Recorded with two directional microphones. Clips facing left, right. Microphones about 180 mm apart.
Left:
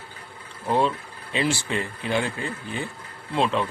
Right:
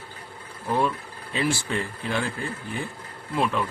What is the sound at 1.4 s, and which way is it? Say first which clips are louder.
A man's voice: left 1 dB; 20° left (ahead or behind).